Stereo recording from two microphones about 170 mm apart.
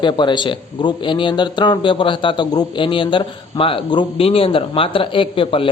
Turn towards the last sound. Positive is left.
turn(degrees=30)  # may be behind; listen again after turning